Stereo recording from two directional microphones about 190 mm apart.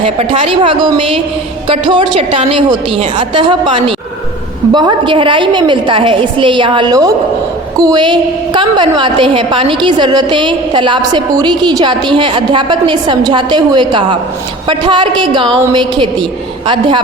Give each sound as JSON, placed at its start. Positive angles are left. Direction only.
{"t": 0.0, "sound": "a woman's voice", "side_deg": -30}